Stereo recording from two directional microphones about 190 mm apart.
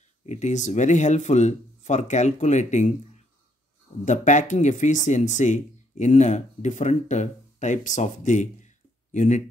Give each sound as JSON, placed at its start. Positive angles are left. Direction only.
{"t": 0.2, "sound": "speech", "side_deg": 35}
{"t": 4.0, "sound": "speech", "side_deg": 40}